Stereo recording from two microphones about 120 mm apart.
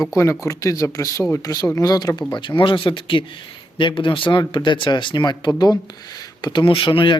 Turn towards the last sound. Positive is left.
turn(degrees=45)  # may be behind; listen again after turning